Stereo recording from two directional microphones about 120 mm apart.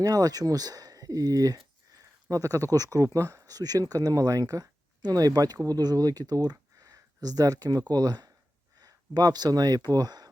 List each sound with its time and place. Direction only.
0.0 s speech: 30° right (ahead or behind)